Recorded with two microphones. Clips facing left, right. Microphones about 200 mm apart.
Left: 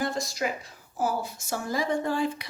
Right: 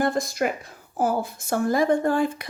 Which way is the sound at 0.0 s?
55° right (ahead or behind).